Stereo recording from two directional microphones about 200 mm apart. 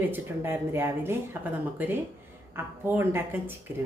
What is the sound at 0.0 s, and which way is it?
Speech, 10° right (ahead or behind).